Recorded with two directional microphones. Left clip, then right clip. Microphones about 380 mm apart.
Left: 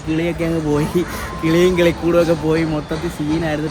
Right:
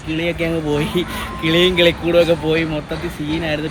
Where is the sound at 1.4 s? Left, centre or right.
Centre.